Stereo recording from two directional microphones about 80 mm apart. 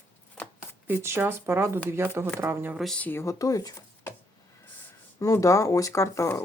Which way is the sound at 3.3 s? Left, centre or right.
Left.